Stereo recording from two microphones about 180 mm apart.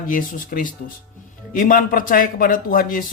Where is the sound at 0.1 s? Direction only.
50° left (ahead or behind).